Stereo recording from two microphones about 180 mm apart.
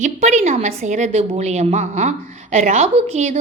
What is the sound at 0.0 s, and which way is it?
A woman's voice, 40° right (ahead or behind).